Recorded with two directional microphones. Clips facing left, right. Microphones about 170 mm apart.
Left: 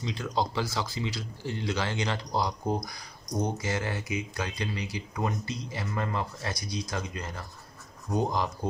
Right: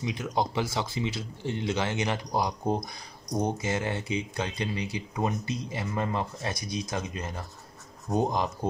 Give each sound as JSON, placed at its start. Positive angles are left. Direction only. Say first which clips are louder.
{"t": 0.0, "sound": "speech", "louder": "right 1 dB", "side_deg": -20}